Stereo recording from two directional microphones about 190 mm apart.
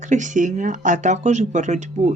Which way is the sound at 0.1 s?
40° right (ahead or behind).